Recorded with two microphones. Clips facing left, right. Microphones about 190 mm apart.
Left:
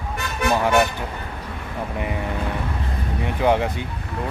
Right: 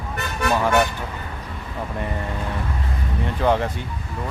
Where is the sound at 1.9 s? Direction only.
10° left (ahead or behind).